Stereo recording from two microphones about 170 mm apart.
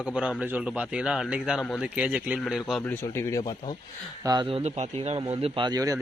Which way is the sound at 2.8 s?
15° left (ahead or behind).